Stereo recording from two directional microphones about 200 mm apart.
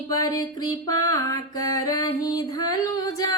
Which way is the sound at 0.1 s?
20° left (ahead or behind).